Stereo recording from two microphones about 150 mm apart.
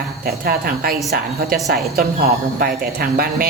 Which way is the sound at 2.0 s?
80° right.